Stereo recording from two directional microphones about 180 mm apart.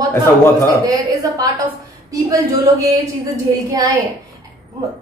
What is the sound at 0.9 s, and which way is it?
A woman's voice, 20° right (ahead or behind).